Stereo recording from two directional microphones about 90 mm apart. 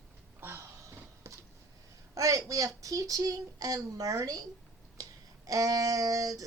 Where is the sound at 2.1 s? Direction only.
40° right (ahead or behind).